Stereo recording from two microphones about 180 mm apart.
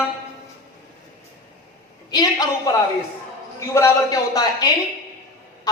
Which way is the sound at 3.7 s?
20° left (ahead or behind).